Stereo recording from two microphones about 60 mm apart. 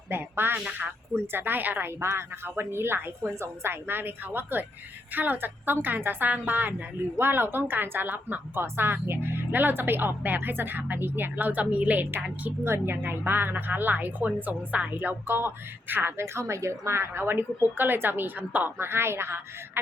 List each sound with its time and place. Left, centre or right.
0.1 s a woman's voice: right
0.6 s a woman's voice: centre
1.1 s a woman's voice: right
2.0 s a woman's voice: right
12.6 s a woman's voice: right